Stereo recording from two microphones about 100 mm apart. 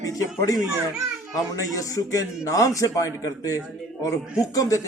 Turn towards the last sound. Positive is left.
turn(degrees=35)  # may be behind; listen again after turning